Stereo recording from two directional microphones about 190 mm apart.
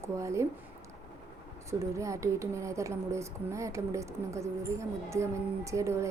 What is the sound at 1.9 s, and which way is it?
A woman's voice, 15° right (ahead or behind).